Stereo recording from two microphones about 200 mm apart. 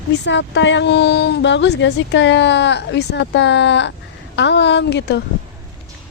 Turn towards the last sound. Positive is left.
turn(degrees=60)  # may be behind; listen again after turning